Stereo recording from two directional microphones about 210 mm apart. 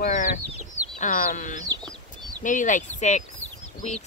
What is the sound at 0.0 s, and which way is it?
Chicken, 35° left (ahead or behind).